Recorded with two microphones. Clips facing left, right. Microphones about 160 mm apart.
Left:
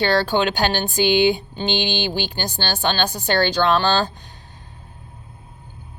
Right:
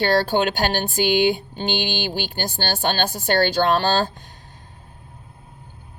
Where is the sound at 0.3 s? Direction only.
50° right (ahead or behind).